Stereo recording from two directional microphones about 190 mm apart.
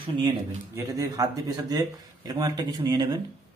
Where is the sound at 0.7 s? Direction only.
15° right (ahead or behind).